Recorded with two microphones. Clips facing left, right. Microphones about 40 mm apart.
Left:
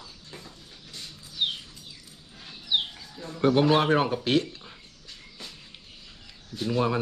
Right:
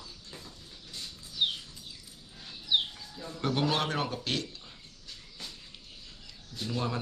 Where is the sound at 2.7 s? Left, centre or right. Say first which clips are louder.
Left 1 dB; centre.